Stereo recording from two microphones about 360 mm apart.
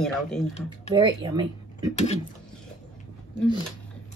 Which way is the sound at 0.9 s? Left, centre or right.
Centre.